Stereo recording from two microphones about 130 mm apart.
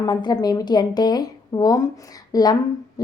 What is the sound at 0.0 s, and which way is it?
Speech, 35° left (ahead or behind).